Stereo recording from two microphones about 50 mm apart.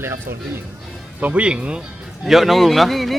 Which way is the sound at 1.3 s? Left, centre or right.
Right.